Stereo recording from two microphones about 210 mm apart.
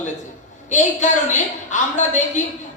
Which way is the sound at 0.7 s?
35° left (ahead or behind).